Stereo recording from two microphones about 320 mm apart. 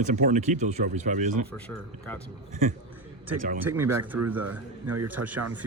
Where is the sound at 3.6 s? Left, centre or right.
Centre.